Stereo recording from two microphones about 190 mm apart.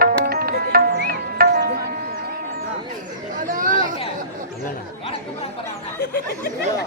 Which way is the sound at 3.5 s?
45° right (ahead or behind).